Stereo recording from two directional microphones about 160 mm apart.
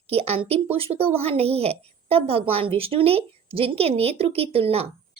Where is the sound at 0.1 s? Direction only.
40° right (ahead or behind).